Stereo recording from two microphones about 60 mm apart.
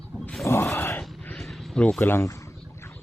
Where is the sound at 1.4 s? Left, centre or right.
Centre.